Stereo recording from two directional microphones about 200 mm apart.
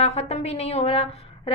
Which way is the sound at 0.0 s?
30° left (ahead or behind).